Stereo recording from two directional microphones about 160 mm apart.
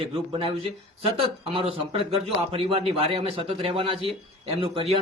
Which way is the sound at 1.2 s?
35° right (ahead or behind).